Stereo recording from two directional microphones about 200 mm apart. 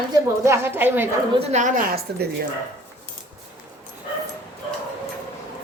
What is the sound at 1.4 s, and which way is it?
Speech, 35° right (ahead or behind).